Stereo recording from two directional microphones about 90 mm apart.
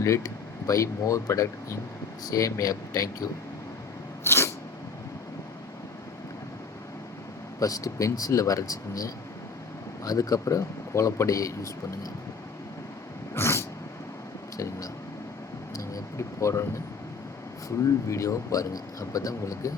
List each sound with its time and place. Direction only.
0.0 s speech: 35° left (ahead or behind)
4.2 s sneeze: 30° left (ahead or behind)
7.6 s speech: 40° left (ahead or behind)
13.3 s cat: 30° left (ahead or behind)
15.7 s a sound: 35° left (ahead or behind)
17.8 s speech: 35° left (ahead or behind)